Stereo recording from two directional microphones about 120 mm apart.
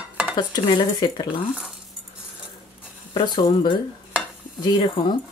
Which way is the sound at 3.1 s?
40° left (ahead or behind).